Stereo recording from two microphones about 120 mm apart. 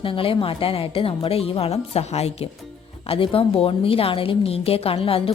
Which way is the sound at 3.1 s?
50° left (ahead or behind).